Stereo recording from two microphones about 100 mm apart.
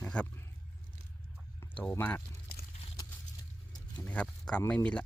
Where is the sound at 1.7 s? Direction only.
15° left (ahead or behind).